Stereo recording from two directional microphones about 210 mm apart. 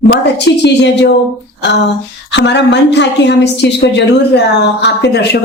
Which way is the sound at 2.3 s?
55° left (ahead or behind).